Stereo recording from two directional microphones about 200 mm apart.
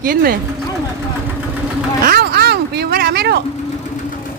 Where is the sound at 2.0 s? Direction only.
50° right (ahead or behind).